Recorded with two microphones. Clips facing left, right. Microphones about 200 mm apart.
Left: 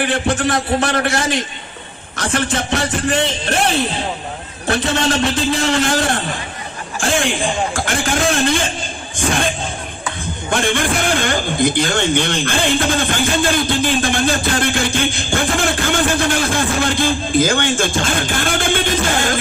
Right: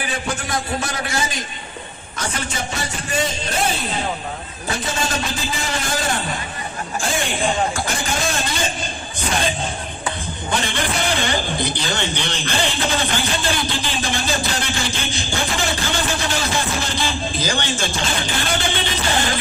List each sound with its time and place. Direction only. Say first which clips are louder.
0.0 s a man's voice: left 9 dB; 70° left (ahead or behind)
2.1 s a man's voice: left 7 dB; 85° left
8.1 s a man's voice: left 7 dB; 55° left (ahead or behind)
10.5 s a man's voice: left 6 dB; 50° left (ahead or behind)